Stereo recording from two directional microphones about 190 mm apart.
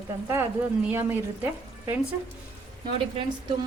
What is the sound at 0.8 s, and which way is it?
Speech, 10° right (ahead or behind).